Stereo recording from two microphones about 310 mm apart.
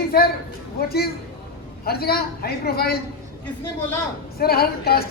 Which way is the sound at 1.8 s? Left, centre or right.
Left.